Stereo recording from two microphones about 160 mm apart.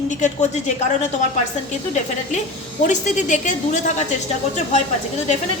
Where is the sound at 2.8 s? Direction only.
50° left (ahead or behind).